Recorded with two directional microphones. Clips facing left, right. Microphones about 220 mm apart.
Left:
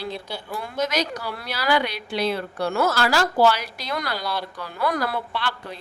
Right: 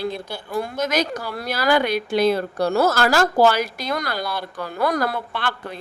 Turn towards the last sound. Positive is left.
turn(degrees=-50)  # may be behind; listen again after turning